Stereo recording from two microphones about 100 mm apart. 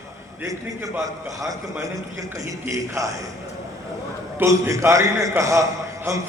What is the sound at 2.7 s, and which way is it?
Speech, 35° right (ahead or behind).